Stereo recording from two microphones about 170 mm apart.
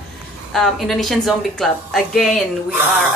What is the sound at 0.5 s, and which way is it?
Speech, centre (ahead or behind).